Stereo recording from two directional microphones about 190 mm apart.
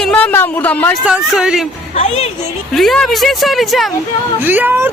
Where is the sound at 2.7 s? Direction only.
Centre (ahead or behind).